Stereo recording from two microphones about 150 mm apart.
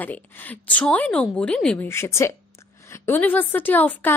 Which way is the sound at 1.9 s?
15° left (ahead or behind).